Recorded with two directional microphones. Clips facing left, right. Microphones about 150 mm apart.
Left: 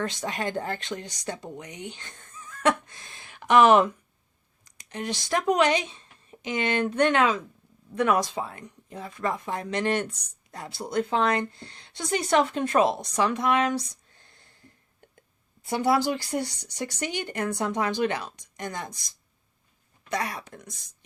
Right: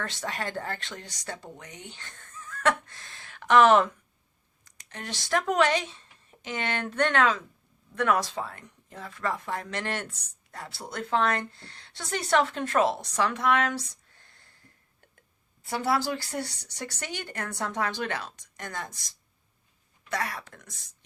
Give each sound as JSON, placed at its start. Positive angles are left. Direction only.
{"t": 0.0, "sound": "speech", "side_deg": 15}
{"t": 15.6, "sound": "speech", "side_deg": 20}
{"t": 20.1, "sound": "speech", "side_deg": 20}